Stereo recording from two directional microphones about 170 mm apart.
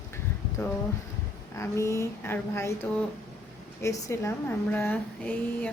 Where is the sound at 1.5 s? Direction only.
15° left (ahead or behind).